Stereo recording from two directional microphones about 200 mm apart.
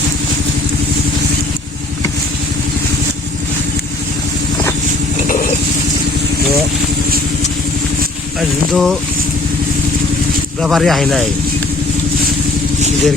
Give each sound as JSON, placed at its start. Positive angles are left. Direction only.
{"t": 8.4, "sound": "speech", "side_deg": 0}
{"t": 10.6, "sound": "speech", "side_deg": 0}